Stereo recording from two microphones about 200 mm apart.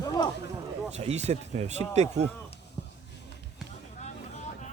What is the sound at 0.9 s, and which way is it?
Speech, 35° right (ahead or behind).